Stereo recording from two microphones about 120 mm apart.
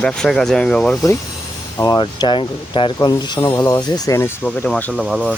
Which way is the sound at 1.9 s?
40° left (ahead or behind).